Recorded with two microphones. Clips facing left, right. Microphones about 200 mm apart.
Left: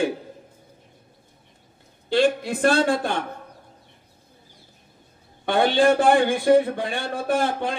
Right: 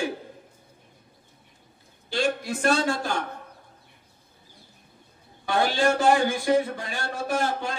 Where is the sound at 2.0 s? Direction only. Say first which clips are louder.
Left 6 dB; 55° left (ahead or behind).